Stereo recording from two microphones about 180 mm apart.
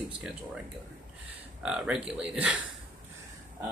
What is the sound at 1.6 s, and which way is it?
Speech, 5° right (ahead or behind).